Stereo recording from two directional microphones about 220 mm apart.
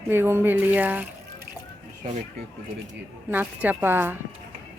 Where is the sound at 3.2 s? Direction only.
10° right (ahead or behind).